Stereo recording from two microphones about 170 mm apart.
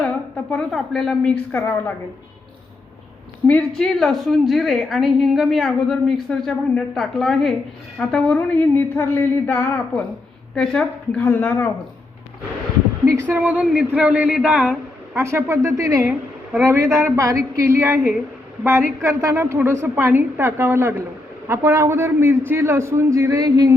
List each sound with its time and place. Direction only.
0.5 s a woman's voice: centre (ahead or behind)
3.4 s a woman's voice: 10° left (ahead or behind)
13.1 s speech: 10° right (ahead or behind)
16.0 s a sound: centre (ahead or behind)
16.6 s speech: 15° right (ahead or behind)